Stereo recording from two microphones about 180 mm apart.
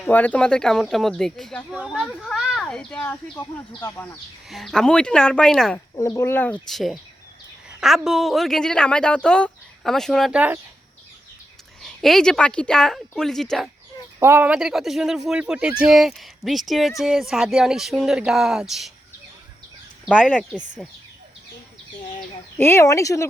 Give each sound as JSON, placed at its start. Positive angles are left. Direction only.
{"t": 0.0, "sound": "speech", "side_deg": 10}
{"t": 4.4, "sound": "speech", "side_deg": 0}
{"t": 6.0, "sound": "speech", "side_deg": 15}
{"t": 11.8, "sound": "speech", "side_deg": 0}
{"t": 14.2, "sound": "speech", "side_deg": -15}
{"t": 20.1, "sound": "speech", "side_deg": 5}
{"t": 22.5, "sound": "speech", "side_deg": 10}